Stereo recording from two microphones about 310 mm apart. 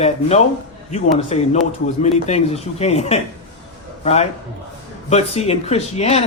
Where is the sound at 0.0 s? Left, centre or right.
Left.